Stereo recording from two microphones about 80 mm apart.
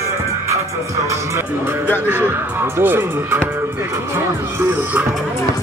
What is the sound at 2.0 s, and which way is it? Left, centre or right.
Speech, right.